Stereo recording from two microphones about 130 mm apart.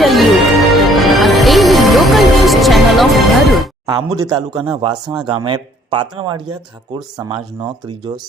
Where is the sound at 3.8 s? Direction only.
30° right (ahead or behind).